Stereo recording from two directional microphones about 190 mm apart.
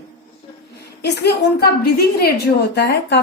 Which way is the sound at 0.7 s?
60° left (ahead or behind).